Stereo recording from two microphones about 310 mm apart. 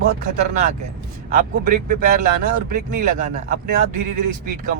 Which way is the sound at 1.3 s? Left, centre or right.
Right.